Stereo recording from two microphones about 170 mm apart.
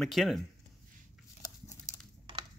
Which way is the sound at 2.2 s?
30° right (ahead or behind).